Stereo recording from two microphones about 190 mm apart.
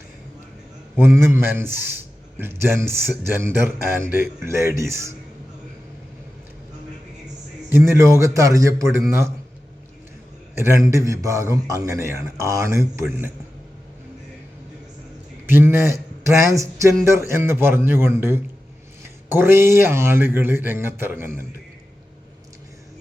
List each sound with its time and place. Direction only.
0.9 s a man's voice: 10° right (ahead or behind)
8.0 s a man's voice: 15° right (ahead or behind)
10.6 s a man's voice: 15° right (ahead or behind)
15.4 s a man's voice: 10° right (ahead or behind)